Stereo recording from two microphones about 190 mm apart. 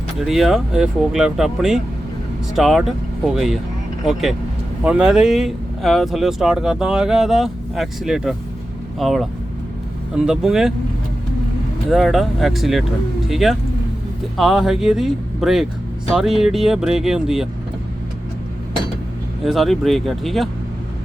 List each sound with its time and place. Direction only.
0.2 s speech: centre (ahead or behind)
11.9 s speech: centre (ahead or behind)
19.5 s speech: centre (ahead or behind)